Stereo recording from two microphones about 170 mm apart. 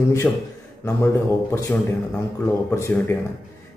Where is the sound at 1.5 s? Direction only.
15° left (ahead or behind).